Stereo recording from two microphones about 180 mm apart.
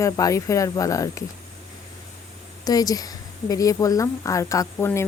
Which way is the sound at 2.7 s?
20° left (ahead or behind).